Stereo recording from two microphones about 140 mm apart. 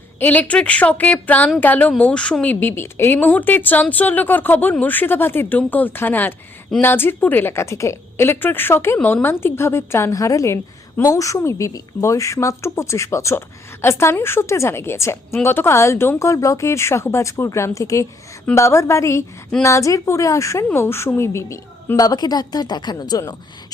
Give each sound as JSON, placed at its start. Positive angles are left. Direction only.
{"t": 0.2, "sound": "a woman's voice", "side_deg": 10}